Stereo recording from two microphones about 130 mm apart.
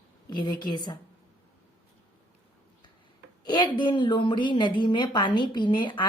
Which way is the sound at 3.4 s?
35° left (ahead or behind).